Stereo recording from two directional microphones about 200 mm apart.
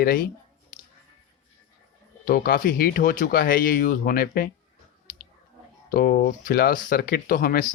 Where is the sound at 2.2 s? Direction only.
45° left (ahead or behind).